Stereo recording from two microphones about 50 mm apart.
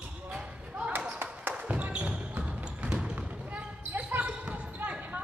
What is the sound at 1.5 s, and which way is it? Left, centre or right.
Basketball bounce, right.